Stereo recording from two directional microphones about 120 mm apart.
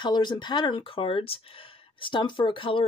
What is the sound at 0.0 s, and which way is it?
Speech, 40° left (ahead or behind).